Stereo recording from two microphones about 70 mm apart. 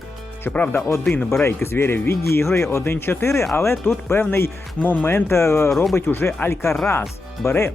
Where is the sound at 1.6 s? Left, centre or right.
Left.